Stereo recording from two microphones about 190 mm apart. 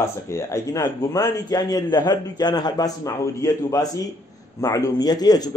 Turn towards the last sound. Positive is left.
turn(degrees=20)  # may be behind; listen again after turning